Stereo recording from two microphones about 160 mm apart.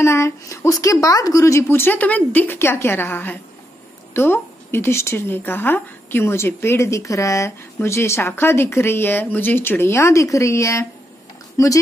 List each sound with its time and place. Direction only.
0.0 s a woman's voice: 15° left (ahead or behind)